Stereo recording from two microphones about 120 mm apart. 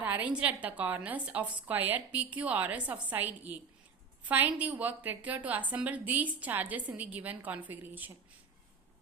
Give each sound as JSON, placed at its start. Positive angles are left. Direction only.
{"t": 0.0, "sound": "a woman's voice", "side_deg": -15}